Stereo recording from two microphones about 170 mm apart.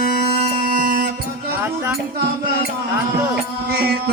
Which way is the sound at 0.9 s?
65° right (ahead or behind).